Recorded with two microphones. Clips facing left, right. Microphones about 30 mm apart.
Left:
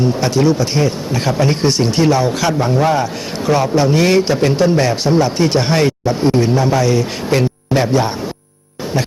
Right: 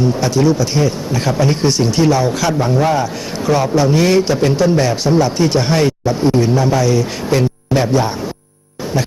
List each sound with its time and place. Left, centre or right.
0.2 s speech: left
1.5 s speech: left